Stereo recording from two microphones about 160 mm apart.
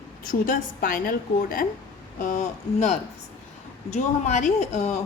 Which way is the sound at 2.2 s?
50° left (ahead or behind).